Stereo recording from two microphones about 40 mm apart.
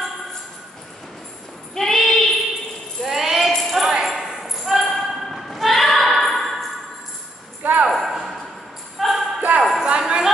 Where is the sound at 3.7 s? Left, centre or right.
Centre.